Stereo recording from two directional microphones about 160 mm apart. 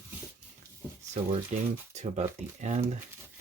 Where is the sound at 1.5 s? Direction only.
45° right (ahead or behind).